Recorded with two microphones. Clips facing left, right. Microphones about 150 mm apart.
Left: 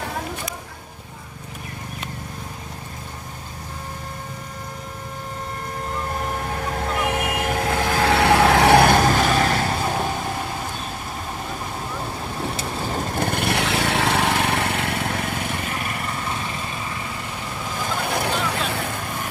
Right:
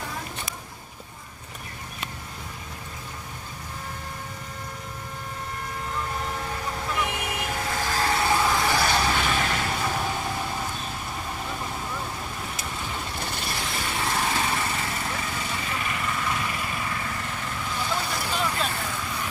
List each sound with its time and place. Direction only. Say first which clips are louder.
6.1 s vehicle: left 4 dB; 55° left (ahead or behind)
12.5 s vehicle: left 7 dB; 35° left (ahead or behind)
17.8 s vehicle: left 7 dB; 60° left (ahead or behind)